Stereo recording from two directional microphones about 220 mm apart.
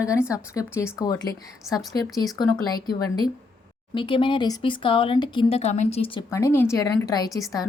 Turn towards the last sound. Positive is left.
turn(degrees=15)  # may be behind; listen again after turning